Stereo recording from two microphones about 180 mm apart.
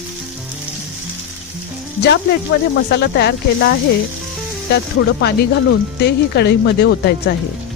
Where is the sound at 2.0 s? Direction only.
65° left (ahead or behind).